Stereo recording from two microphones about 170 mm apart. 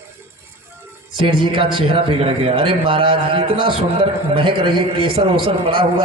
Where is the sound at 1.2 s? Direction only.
30° right (ahead or behind).